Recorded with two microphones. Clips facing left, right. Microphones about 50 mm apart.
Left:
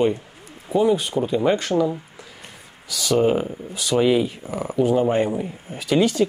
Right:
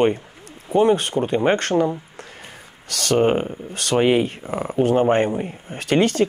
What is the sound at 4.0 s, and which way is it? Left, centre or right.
Speech, right.